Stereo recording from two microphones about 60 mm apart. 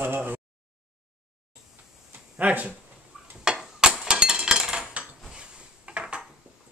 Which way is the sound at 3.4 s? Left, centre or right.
Centre.